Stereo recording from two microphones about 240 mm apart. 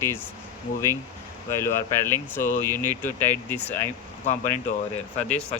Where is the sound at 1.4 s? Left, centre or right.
Centre.